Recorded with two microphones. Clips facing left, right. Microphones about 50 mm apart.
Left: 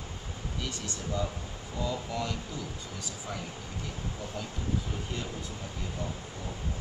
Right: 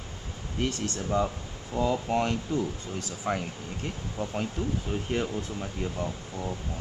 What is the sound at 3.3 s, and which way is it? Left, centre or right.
Speech, right.